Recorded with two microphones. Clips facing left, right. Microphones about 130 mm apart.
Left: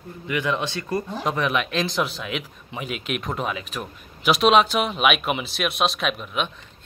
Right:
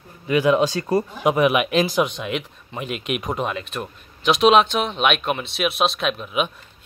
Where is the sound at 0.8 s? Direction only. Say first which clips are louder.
Right 6 dB; 35° right (ahead or behind).